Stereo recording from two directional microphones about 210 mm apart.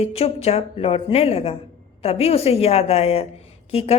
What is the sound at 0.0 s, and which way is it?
A woman's voice, 30° left (ahead or behind).